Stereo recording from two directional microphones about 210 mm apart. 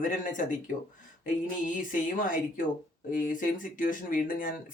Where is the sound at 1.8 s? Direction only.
40° left (ahead or behind).